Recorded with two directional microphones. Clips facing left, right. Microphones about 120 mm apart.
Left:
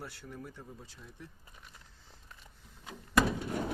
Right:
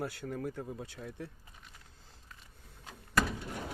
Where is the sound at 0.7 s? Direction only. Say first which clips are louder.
Right 8 dB; 70° right (ahead or behind).